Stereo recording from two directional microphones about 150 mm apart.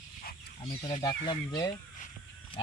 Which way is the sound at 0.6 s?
30° left (ahead or behind).